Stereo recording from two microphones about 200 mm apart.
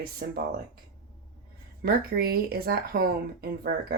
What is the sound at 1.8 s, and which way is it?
Speech, 50° right (ahead or behind).